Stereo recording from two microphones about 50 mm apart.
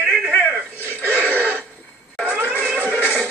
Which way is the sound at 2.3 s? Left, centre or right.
Right.